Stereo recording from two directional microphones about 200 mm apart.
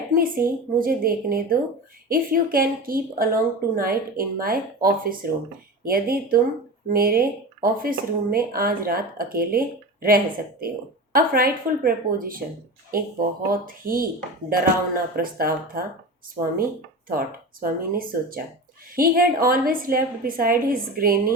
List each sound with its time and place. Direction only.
0.1 s a woman's voice: 45° right (ahead or behind)
11.3 s a woman's voice: 45° right (ahead or behind)
17.1 s a woman's voice: 45° right (ahead or behind)